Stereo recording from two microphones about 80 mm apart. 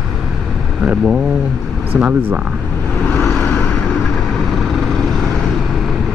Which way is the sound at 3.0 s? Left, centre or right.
Centre.